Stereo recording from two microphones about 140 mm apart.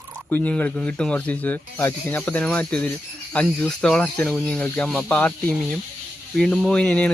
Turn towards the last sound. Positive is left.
turn(degrees=10)  # may be behind; listen again after turning